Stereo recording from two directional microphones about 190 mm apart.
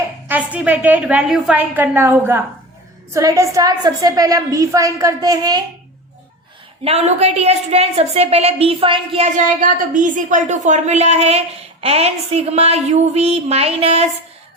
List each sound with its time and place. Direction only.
0.3 s a woman's voice: 10° right (ahead or behind)
6.8 s a woman's voice: 35° right (ahead or behind)